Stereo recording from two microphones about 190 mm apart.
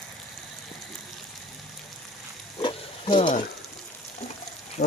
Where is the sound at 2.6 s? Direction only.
25° left (ahead or behind).